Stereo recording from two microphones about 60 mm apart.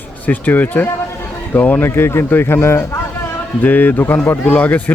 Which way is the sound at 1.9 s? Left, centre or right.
Left.